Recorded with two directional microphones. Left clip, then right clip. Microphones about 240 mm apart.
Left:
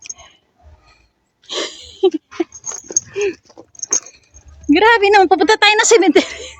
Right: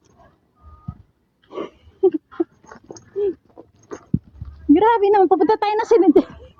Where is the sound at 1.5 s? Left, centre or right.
Left.